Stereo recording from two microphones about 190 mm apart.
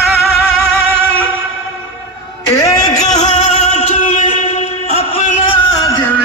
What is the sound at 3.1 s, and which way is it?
Music, 35° left (ahead or behind).